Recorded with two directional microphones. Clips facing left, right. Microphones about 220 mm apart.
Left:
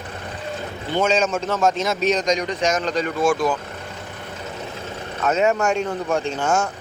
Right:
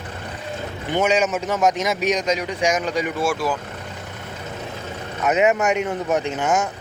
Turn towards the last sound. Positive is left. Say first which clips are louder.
# even
turn(degrees=-20)  # may be behind; listen again after turning